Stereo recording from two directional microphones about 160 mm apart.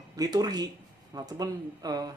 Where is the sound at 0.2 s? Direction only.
25° right (ahead or behind).